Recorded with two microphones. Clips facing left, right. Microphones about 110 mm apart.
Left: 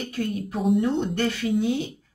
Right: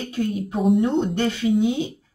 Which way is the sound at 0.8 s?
20° right (ahead or behind).